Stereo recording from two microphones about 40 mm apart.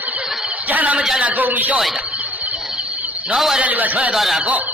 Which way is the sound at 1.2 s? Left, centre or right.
Right.